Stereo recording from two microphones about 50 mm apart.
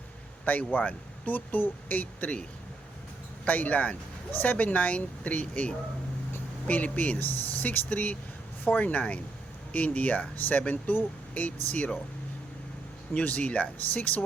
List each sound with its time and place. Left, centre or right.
0.4 s speech: left
3.4 s speech: left
13.1 s speech: left